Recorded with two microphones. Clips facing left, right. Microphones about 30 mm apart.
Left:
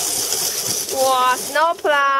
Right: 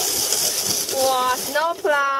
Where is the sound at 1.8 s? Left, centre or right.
Left.